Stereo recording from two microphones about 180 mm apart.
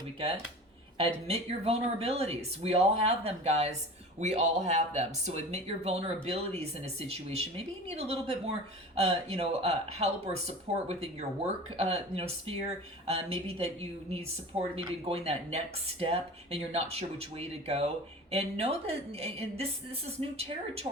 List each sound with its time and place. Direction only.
0.9 s speech: 35° right (ahead or behind)
14.8 s speech: 35° right (ahead or behind)